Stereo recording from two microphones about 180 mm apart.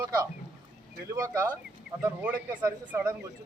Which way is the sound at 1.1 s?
20° right (ahead or behind).